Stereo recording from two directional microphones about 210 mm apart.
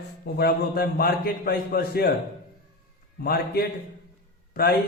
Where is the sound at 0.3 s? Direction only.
45° left (ahead or behind).